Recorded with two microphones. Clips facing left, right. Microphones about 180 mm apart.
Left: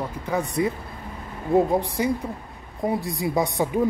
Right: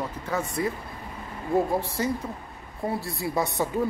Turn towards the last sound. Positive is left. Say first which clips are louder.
# left 3 dB
turn(degrees=15)  # may be behind; listen again after turning